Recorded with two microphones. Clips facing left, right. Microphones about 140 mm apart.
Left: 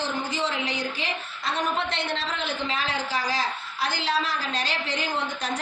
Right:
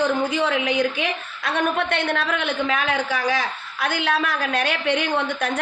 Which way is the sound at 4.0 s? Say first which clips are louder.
Right 5 dB; 55° right (ahead or behind).